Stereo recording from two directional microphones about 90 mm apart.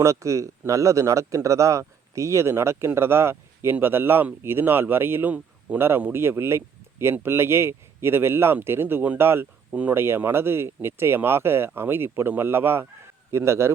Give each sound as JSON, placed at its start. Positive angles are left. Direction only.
{"t": 0.0, "sound": "speech", "side_deg": -35}